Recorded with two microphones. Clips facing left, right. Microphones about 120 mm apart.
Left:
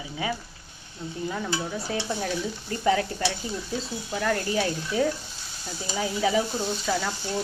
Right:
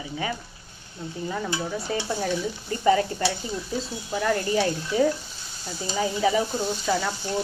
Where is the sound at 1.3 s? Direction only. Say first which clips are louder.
Right 2 dB; centre (ahead or behind).